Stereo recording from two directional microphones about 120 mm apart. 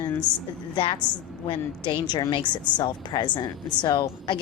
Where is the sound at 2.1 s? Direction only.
40° left (ahead or behind).